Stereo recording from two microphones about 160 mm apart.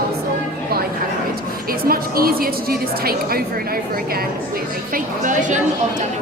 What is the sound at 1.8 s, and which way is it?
A woman's voice, 70° right (ahead or behind).